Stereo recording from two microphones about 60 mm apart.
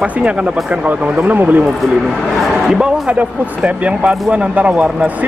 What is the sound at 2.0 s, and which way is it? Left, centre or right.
Speech, centre.